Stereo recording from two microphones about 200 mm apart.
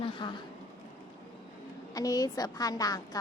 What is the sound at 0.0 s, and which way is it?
Speech, 25° left (ahead or behind).